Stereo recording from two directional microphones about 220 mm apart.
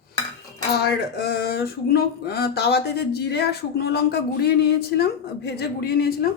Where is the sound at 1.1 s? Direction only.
45° left (ahead or behind).